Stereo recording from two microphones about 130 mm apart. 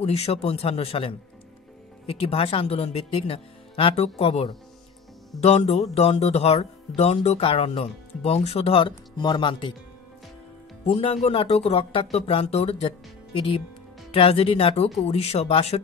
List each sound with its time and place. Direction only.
0.0 s speech: 50° left (ahead or behind)
10.9 s speech: 50° left (ahead or behind)